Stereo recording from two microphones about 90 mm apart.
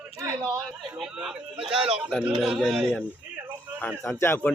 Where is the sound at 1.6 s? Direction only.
90° right.